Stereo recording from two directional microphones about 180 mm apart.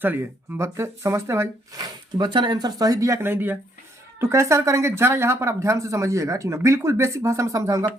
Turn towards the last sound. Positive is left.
turn(degrees=-15)  # may be behind; listen again after turning